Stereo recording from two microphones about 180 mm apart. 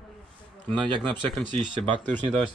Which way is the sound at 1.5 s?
25° right (ahead or behind).